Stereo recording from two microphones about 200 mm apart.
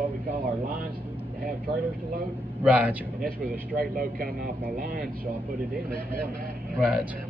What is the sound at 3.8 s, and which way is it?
Speech, 45° right (ahead or behind).